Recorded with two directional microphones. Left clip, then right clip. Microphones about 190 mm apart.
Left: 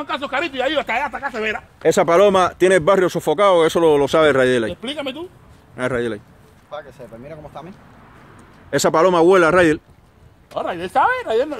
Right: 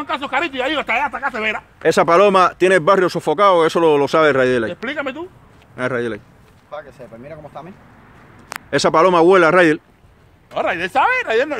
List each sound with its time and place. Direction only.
0.0 s speech: 55° right (ahead or behind)
1.8 s speech: 10° right (ahead or behind)
4.8 s speech: 15° right (ahead or behind)
5.8 s speech: centre (ahead or behind)
6.7 s speech: 15° left (ahead or behind)
8.6 s speech: 5° right (ahead or behind)
10.5 s speech: 20° right (ahead or behind)